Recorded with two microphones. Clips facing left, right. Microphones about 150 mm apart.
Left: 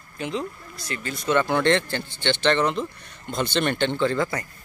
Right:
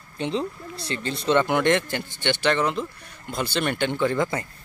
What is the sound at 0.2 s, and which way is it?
Speech, 30° right (ahead or behind).